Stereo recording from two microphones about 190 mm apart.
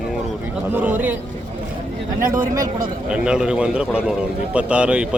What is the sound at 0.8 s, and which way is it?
Speech, 10° right (ahead or behind).